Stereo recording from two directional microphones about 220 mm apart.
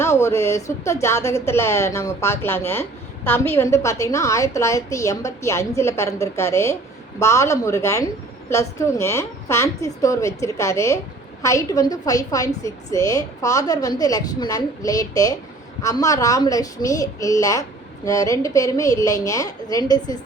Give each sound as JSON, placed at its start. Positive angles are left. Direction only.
{"t": 0.0, "sound": "a woman's voice", "side_deg": 10}